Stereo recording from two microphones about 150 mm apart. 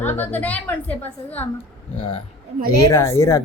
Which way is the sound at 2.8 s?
20° left (ahead or behind).